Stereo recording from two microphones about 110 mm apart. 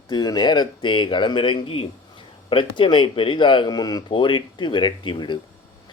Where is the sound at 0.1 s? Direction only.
40° left (ahead or behind).